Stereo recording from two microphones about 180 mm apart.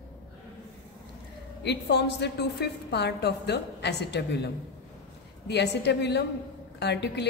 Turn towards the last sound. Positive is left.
turn(degrees=70)  # may be behind; listen again after turning